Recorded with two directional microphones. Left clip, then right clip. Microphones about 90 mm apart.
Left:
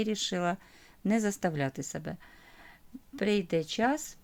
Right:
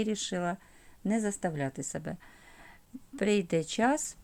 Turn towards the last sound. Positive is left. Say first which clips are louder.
# right 1 dB
turn(degrees=-15)  # may be behind; listen again after turning